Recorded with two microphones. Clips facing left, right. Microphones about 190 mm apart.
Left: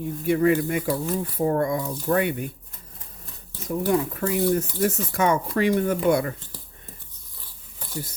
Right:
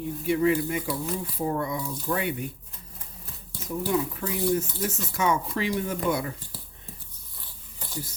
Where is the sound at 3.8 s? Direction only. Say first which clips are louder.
Left 4 dB; 55° left (ahead or behind).